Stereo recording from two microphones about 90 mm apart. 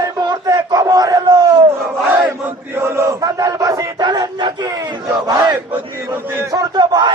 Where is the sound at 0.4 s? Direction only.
40° right (ahead or behind).